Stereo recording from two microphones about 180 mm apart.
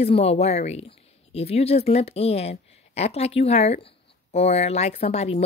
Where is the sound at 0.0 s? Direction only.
35° left (ahead or behind).